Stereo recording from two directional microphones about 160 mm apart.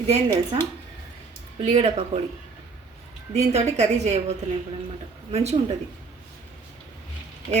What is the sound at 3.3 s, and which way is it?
A woman's voice, 45° right (ahead or behind).